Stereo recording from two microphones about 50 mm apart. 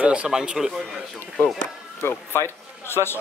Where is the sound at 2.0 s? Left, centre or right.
Left.